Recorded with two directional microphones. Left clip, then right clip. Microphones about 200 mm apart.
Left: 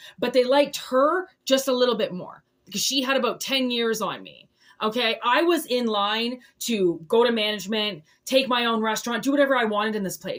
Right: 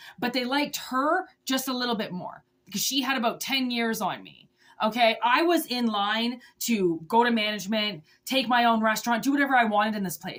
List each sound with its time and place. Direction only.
0.2 s speech: 20° right (ahead or behind)